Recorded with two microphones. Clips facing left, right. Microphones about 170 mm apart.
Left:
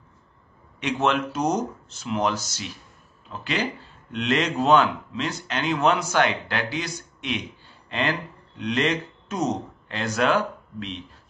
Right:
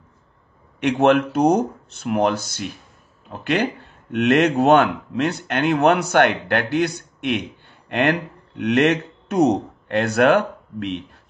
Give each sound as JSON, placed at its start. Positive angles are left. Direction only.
{"t": 0.7, "sound": "speech", "side_deg": -60}